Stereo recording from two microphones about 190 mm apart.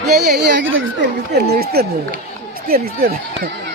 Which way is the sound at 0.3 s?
60° right (ahead or behind).